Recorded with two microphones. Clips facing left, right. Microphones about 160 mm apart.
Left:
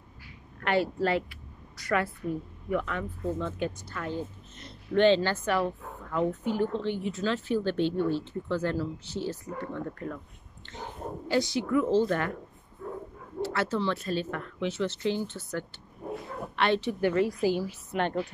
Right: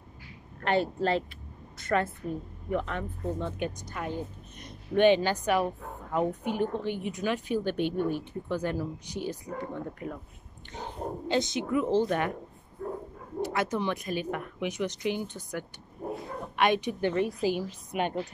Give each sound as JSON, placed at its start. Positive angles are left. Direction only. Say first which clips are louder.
{"t": 0.6, "sound": "speech", "louder": "even", "side_deg": -20}
{"t": 13.4, "sound": "speech", "louder": "even", "side_deg": -15}